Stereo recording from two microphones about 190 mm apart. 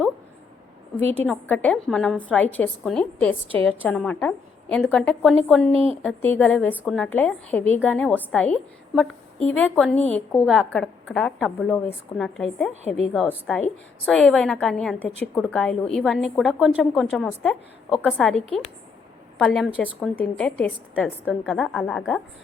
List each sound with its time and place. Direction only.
0.9 s a woman's voice: 10° left (ahead or behind)
5.7 s a woman's voice: 30° right (ahead or behind)
6.0 s a woman's voice: 10° left (ahead or behind)